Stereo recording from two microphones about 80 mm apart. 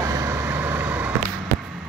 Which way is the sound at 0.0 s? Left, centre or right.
Right.